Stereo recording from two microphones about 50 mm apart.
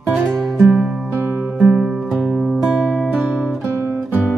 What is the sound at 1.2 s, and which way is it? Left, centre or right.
Music, right.